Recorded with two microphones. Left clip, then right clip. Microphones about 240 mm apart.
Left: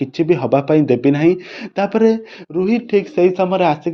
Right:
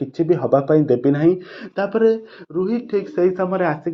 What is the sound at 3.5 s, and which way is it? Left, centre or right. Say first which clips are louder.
Speech: left 5 dB; left.